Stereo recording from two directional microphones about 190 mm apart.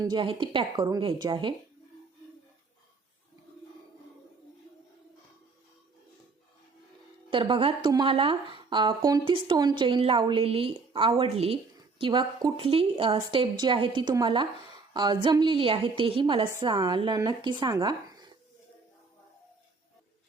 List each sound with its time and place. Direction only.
0.0 s a woman's voice: 25° right (ahead or behind)
7.3 s a woman's voice: 25° right (ahead or behind)